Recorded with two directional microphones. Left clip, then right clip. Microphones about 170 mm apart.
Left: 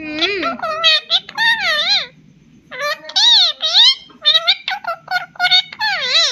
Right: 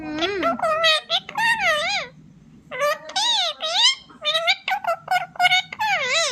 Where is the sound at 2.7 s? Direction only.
25° right (ahead or behind).